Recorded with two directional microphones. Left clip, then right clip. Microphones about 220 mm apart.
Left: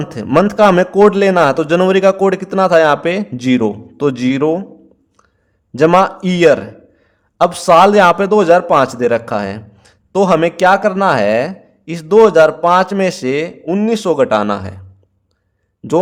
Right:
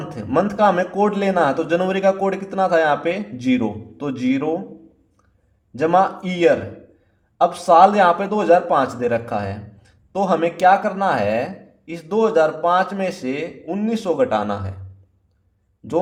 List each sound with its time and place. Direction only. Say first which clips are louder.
0.0 s a man's voice: left 7 dB; 40° left (ahead or behind)
5.7 s a man's voice: left 6 dB; 40° left (ahead or behind)